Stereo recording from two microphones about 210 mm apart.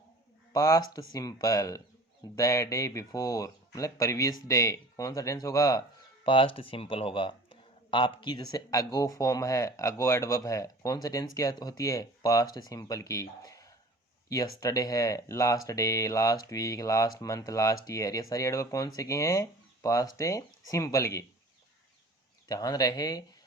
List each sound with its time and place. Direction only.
0.5 s speech: 15° left (ahead or behind)
22.4 s speech: 20° left (ahead or behind)